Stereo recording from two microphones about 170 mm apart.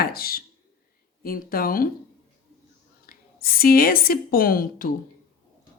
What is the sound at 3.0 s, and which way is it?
Speech, 60° left (ahead or behind).